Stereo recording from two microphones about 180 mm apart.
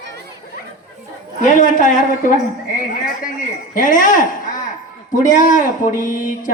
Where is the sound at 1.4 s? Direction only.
45° left (ahead or behind).